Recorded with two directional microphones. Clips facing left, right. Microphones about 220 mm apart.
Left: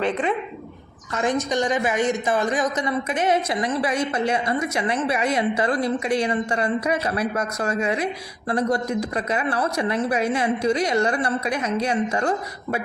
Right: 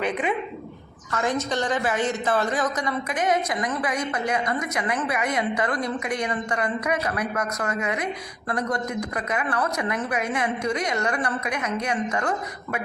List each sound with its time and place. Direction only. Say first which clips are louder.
0.0 s speech: left 3 dB; centre (ahead or behind)
1.1 s a woman's voice: left 3 dB; 15° left (ahead or behind)